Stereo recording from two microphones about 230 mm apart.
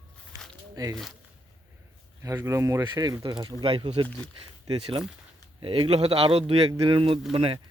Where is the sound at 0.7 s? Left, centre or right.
Centre.